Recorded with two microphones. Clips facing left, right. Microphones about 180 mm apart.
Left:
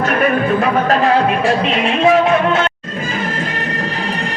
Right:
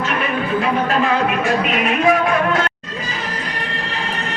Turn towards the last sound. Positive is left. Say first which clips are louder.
# left 4 dB
turn(degrees=25)  # may be behind; listen again after turning